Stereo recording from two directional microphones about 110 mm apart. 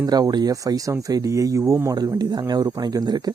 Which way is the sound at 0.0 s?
35° right (ahead or behind).